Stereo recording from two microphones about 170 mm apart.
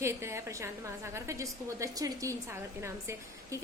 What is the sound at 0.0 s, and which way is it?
A woman's voice, 15° right (ahead or behind).